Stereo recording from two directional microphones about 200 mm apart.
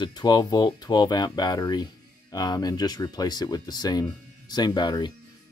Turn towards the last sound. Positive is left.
turn(degrees=20)  # may be behind; listen again after turning